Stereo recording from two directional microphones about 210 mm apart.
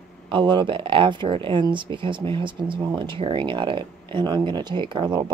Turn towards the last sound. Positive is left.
turn(degrees=-20)  # may be behind; listen again after turning